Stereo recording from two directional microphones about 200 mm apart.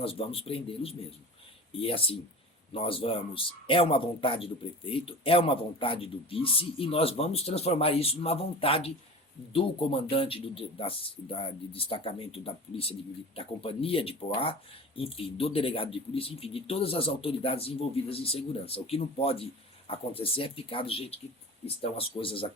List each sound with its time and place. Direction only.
0.0 s speech: 30° left (ahead or behind)